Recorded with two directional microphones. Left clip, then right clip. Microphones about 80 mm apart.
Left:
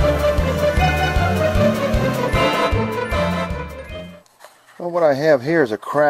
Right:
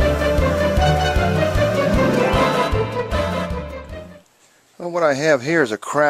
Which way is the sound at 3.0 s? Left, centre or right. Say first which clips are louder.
Left 1 dB; centre.